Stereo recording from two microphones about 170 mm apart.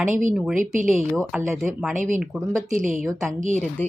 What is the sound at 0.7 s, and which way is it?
Speech, 50° right (ahead or behind).